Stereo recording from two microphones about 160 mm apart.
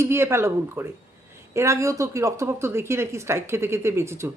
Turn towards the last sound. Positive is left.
turn(degrees=-15)  # may be behind; listen again after turning